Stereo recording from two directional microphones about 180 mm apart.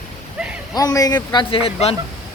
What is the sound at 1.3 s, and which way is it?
Speech, 30° left (ahead or behind).